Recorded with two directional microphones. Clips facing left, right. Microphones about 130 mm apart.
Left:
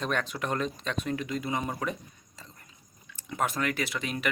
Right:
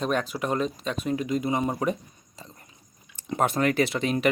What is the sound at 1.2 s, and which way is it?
Speech, 20° right (ahead or behind).